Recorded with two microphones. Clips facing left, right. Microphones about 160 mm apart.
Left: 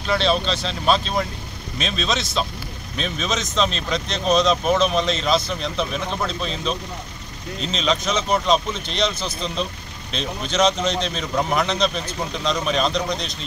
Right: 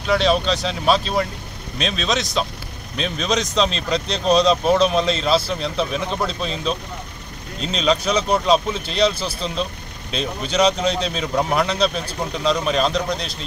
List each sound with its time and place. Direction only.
0.0 s a man's voice: 10° right (ahead or behind)
4.4 s speech: 35° right (ahead or behind)
4.8 s a man's voice: centre (ahead or behind)